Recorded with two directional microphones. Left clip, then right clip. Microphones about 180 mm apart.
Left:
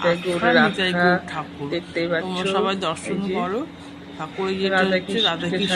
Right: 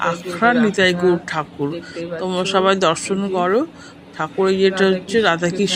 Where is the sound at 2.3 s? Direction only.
25° right (ahead or behind).